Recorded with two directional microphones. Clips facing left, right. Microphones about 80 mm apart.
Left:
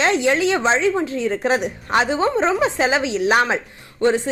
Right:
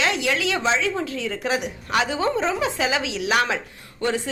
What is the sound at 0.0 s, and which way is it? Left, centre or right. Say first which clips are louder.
A woman's voice: left 5 dB; left.